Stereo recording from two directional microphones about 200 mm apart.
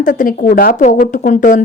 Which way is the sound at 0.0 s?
40° left (ahead or behind).